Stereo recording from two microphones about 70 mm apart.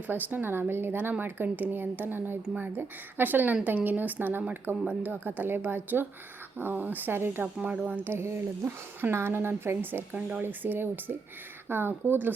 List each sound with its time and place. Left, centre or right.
0.1 s speech: right
7.4 s speech: centre
7.9 s speech: right